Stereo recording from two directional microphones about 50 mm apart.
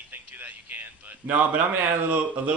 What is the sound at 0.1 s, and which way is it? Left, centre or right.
Speech, right.